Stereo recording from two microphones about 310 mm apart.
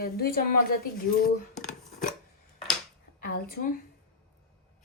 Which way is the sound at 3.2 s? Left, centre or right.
Left.